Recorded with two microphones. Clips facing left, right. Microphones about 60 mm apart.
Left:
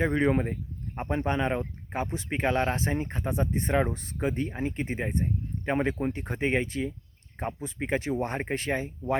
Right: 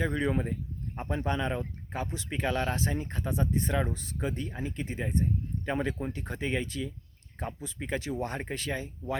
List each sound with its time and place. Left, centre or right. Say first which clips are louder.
0.0 s speech: left 5 dB; left